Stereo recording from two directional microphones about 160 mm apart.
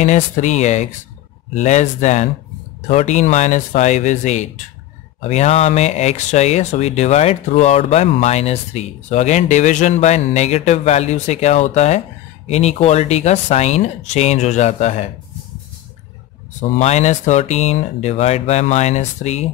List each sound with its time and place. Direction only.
0.0 s speech: 45° left (ahead or behind)
16.7 s speech: 45° left (ahead or behind)